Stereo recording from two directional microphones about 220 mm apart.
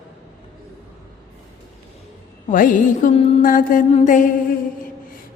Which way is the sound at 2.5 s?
35° left (ahead or behind).